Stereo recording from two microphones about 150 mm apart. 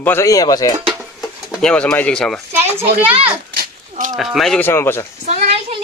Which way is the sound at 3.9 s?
60° right (ahead or behind).